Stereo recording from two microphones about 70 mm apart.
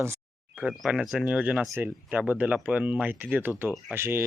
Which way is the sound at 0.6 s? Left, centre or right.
Centre.